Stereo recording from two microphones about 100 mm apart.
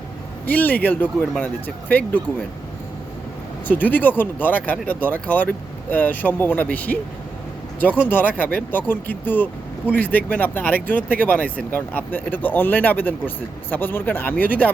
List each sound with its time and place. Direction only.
0.4 s speech: 15° left (ahead or behind)
3.7 s speech: 15° left (ahead or behind)
8.1 s speech: 20° left (ahead or behind)